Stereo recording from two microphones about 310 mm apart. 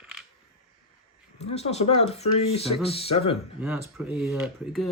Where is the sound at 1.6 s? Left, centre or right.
Centre.